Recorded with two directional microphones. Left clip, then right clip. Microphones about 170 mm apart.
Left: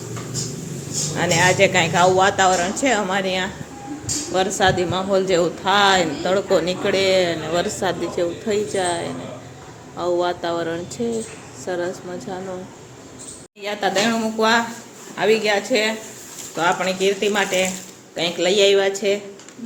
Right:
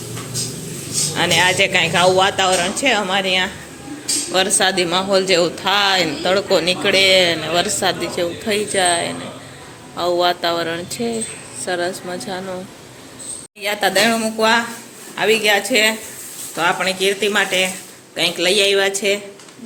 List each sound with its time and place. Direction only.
1.1 s speech: 5° left (ahead or behind)
13.6 s a woman's voice: centre (ahead or behind)